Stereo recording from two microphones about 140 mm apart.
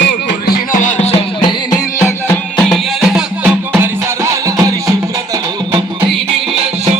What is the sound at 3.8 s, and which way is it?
Music, 20° right (ahead or behind).